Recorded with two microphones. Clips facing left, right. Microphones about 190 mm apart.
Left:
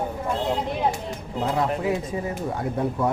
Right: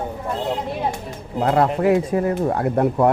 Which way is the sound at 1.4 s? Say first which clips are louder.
Right 7 dB; 65° right (ahead or behind).